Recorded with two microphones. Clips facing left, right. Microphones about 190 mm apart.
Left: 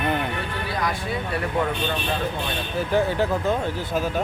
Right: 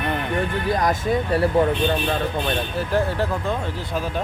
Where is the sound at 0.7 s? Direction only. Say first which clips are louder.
Right 6 dB; 45° right (ahead or behind).